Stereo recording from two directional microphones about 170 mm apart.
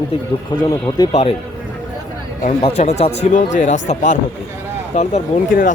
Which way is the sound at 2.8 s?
40° left (ahead or behind).